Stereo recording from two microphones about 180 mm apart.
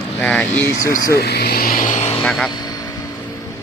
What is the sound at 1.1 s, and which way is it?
Speech, 60° left (ahead or behind).